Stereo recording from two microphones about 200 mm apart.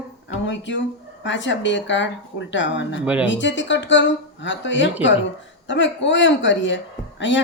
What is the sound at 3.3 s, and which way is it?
Speech, 65° left (ahead or behind).